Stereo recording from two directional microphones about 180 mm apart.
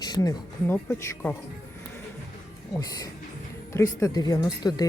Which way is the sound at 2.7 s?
20° left (ahead or behind).